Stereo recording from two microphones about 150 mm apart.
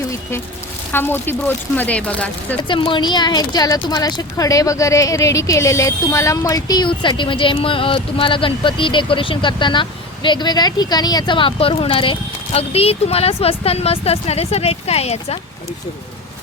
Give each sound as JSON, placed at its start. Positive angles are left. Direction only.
{"t": 0.1, "sound": "speech", "side_deg": 15}
{"t": 2.6, "sound": "a woman's voice", "side_deg": 35}